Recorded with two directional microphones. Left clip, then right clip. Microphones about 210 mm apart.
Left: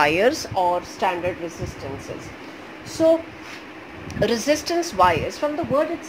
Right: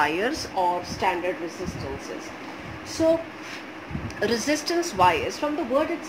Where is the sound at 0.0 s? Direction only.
45° left (ahead or behind).